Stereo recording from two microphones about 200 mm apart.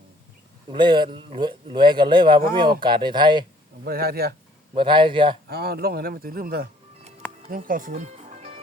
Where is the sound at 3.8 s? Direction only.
50° right (ahead or behind).